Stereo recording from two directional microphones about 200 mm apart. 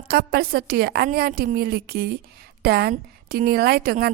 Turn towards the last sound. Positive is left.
turn(degrees=-50)  # may be behind; listen again after turning